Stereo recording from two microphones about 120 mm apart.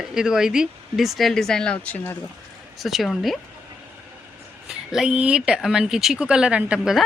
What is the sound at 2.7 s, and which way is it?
Speech, centre (ahead or behind).